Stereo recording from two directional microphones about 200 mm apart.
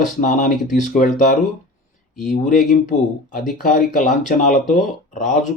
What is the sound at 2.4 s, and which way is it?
A man's voice, 40° left (ahead or behind).